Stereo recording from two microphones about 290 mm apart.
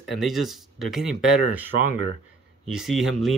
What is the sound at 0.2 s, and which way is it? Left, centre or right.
Speech, centre.